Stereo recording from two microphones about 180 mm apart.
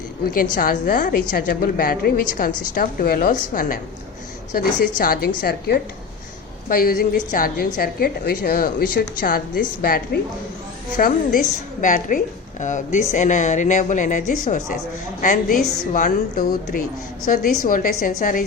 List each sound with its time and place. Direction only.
0.3 s a woman's voice: 50° left (ahead or behind)